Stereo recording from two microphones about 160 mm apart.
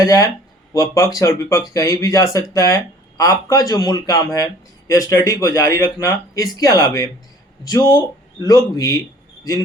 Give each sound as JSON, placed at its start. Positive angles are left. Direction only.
{"t": 0.0, "sound": "speech", "side_deg": 20}